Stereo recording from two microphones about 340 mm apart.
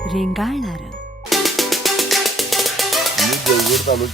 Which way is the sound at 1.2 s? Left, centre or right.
Centre.